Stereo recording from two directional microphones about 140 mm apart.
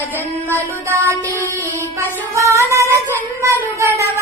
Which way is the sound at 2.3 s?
20° right (ahead or behind).